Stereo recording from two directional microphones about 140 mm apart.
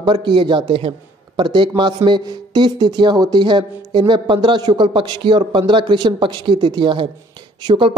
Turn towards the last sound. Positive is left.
turn(degrees=-35)  # may be behind; listen again after turning